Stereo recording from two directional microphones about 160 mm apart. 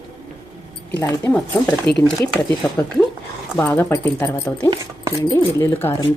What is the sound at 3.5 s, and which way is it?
Speech, 10° left (ahead or behind).